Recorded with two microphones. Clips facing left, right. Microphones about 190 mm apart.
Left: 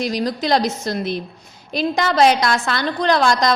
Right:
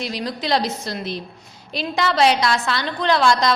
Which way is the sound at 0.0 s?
45° left (ahead or behind).